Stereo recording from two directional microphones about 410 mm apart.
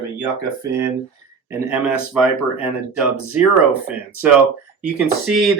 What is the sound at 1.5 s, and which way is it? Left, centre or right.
Speech, centre.